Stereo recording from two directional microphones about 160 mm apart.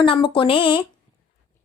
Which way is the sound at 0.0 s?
30° left (ahead or behind).